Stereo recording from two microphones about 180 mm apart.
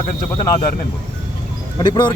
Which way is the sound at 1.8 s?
25° left (ahead or behind).